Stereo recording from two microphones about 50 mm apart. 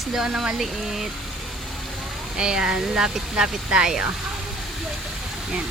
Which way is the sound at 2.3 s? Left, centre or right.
Centre.